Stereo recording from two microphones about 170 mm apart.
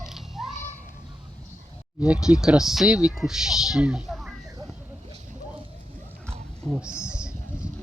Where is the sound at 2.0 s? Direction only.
5° right (ahead or behind).